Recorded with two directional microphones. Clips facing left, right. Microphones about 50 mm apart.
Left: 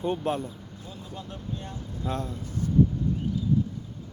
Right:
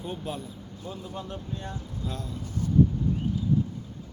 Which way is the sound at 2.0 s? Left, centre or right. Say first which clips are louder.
Left 6 dB; left.